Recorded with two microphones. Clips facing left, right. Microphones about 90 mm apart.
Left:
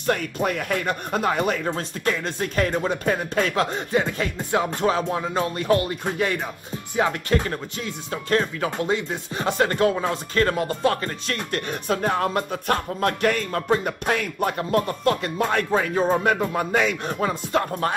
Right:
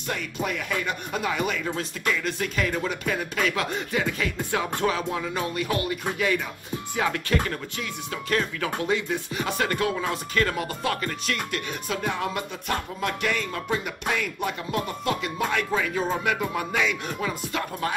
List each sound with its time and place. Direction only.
0.0 s speech: 55° left (ahead or behind); by 4.3 s 35° left (ahead or behind)
4.4 s speech: 25° left (ahead or behind)
11.5 s speech: 45° left (ahead or behind)